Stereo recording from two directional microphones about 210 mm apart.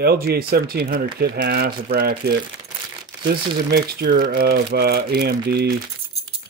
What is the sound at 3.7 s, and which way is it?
Speech, 45° right (ahead or behind).